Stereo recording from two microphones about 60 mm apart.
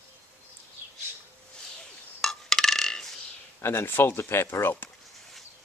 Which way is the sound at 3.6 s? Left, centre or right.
Left.